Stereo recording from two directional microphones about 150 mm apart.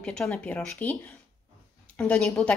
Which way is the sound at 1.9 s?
5° left (ahead or behind).